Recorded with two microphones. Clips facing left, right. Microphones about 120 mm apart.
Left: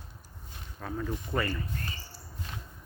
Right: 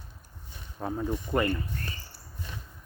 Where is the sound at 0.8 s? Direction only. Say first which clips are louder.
Right 4 dB; 20° right (ahead or behind).